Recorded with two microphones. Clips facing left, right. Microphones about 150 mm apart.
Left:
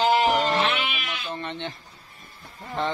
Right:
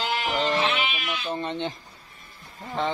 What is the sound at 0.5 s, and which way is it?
Goat, 60° left (ahead or behind).